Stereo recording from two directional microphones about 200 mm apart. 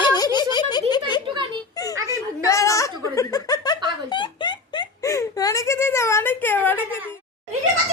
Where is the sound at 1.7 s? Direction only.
15° left (ahead or behind).